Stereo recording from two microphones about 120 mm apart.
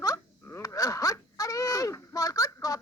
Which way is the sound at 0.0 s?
25° left (ahead or behind).